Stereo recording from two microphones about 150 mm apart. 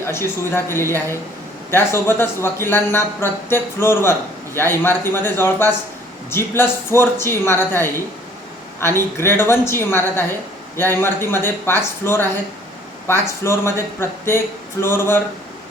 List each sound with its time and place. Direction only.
0.1 s speech: 15° left (ahead or behind)